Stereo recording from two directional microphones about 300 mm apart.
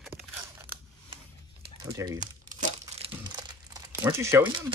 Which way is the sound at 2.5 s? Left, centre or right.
Centre.